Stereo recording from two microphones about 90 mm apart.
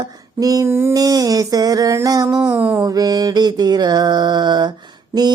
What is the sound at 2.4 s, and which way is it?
Speech, 15° right (ahead or behind).